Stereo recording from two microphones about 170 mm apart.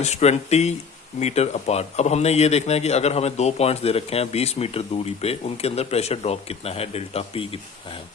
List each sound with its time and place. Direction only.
0.0 s speech: 40° left (ahead or behind)